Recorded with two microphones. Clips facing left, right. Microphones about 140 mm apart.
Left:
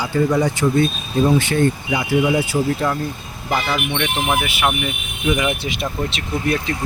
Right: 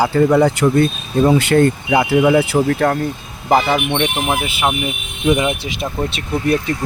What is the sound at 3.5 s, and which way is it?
Speech, 35° right (ahead or behind).